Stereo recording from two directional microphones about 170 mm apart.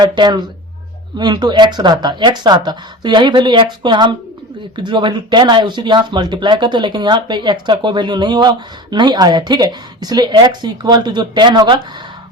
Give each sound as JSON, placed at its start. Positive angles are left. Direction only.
{"t": 0.0, "sound": "speech", "side_deg": -25}